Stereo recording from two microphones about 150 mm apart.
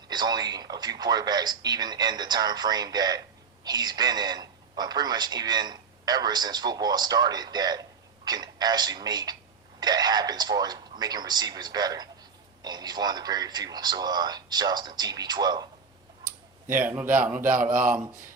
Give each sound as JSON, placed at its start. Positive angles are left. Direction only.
{"t": 0.1, "sound": "a man's voice", "side_deg": -25}
{"t": 16.6, "sound": "speech", "side_deg": -15}
{"t": 17.7, "sound": "speech", "side_deg": -65}